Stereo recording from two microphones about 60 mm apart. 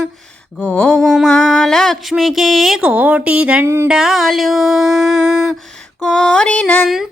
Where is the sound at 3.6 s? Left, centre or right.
Right.